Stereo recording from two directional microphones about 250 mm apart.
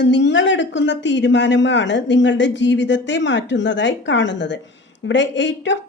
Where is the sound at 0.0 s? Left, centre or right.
Left.